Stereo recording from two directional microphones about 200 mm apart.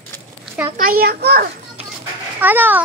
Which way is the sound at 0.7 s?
50° right (ahead or behind).